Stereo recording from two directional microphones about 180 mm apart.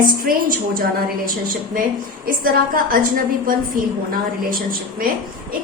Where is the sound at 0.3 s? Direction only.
50° right (ahead or behind).